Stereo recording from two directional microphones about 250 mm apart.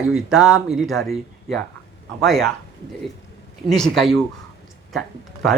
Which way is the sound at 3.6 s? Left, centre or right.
Centre.